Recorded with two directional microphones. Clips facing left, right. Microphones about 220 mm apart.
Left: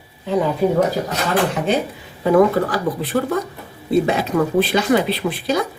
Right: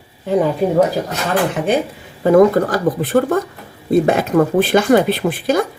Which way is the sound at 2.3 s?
45° right (ahead or behind).